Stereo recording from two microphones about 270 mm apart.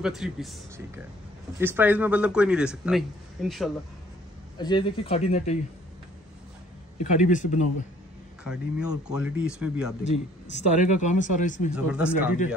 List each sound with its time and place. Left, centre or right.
0.0 s a man's voice: centre
4.6 s speech: centre
7.0 s speech: left
8.5 s a man's voice: centre
10.5 s speech: left
11.7 s a man's voice: centre